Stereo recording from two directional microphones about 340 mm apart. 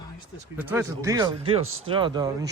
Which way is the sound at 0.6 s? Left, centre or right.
Centre.